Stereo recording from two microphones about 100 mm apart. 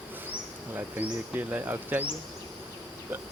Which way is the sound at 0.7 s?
20° right (ahead or behind).